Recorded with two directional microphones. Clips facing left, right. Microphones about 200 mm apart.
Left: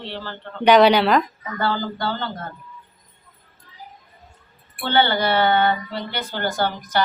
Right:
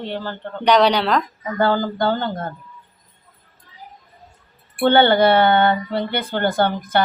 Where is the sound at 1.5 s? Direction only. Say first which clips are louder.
Right 6 dB; 50° right (ahead or behind).